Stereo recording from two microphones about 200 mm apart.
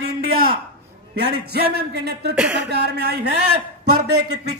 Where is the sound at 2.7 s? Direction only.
55° right (ahead or behind).